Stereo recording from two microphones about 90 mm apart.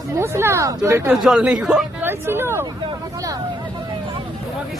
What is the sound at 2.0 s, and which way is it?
Speech, 25° right (ahead or behind).